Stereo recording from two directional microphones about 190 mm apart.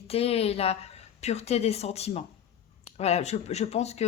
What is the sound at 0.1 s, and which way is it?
A woman's voice, 30° left (ahead or behind).